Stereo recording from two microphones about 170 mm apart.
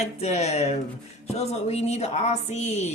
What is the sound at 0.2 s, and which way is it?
Speech, 40° left (ahead or behind).